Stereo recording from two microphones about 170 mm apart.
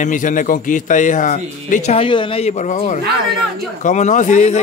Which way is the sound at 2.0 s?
30° left (ahead or behind).